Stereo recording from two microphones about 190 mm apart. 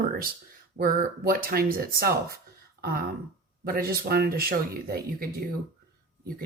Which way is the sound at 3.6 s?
50° right (ahead or behind).